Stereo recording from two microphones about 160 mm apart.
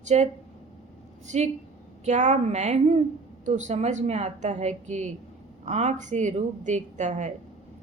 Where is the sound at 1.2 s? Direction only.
45° right (ahead or behind).